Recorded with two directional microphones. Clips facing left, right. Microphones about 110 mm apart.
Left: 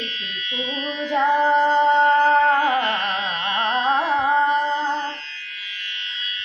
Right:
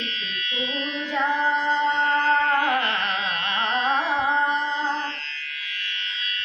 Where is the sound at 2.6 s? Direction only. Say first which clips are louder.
Left 3 dB; 15° left (ahead or behind).